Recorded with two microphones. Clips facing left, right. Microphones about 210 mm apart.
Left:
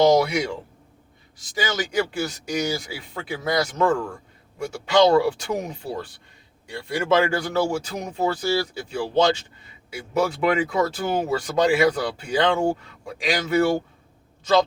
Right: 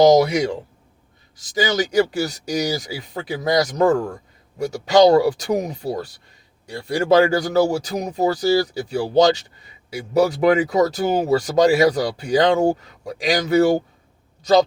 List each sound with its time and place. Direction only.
0.0 s speech: 40° right (ahead or behind)